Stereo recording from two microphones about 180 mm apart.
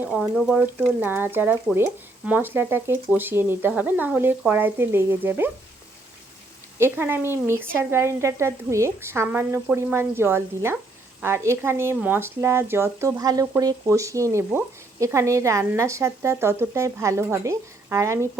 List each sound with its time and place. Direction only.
0.0 s speech: 5° right (ahead or behind)
6.7 s speech: 10° right (ahead or behind)